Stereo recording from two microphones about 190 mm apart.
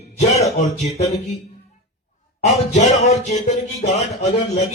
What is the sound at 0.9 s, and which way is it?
Speech, 35° left (ahead or behind).